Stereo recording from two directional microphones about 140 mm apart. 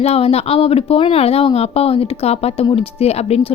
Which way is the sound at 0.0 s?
45° left (ahead or behind).